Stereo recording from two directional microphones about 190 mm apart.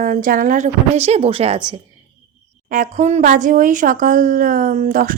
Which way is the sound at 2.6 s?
45° right (ahead or behind).